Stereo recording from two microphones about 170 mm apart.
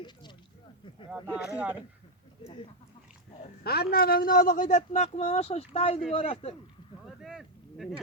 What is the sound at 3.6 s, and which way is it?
A man's voice, 65° left (ahead or behind).